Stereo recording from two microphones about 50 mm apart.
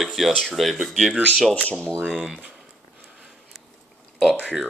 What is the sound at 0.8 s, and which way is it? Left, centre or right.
Speech, centre.